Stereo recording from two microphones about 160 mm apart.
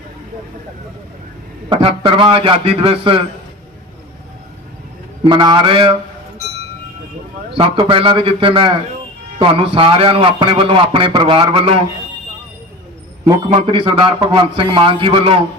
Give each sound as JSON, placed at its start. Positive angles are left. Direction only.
{"t": 1.7, "sound": "a man's voice", "side_deg": -35}
{"t": 5.2, "sound": "a man's voice", "side_deg": -30}
{"t": 7.5, "sound": "a man's voice", "side_deg": -35}
{"t": 13.7, "sound": "a man's voice", "side_deg": -35}